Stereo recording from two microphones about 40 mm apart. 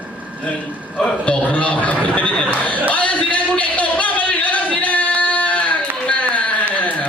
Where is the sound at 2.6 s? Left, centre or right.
Left.